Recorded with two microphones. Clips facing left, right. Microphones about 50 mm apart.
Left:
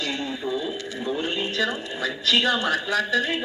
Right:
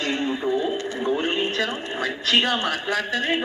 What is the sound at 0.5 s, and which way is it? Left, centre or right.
Speech, right.